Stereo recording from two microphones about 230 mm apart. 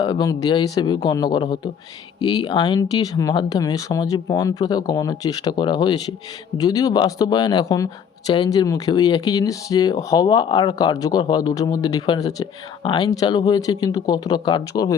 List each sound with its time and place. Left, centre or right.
0.0 s speech: centre